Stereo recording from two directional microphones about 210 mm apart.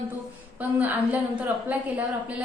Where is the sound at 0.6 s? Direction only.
10° right (ahead or behind).